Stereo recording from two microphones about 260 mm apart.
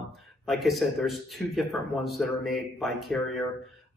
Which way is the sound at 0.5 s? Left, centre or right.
Centre.